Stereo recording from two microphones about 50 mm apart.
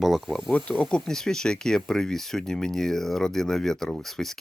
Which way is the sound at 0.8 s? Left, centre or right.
Centre.